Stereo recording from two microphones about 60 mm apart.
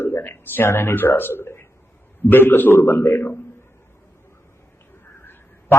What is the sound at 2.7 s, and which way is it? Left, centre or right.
Speech, left.